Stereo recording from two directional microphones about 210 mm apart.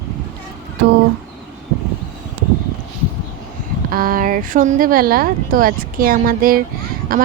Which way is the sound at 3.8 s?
40° right (ahead or behind).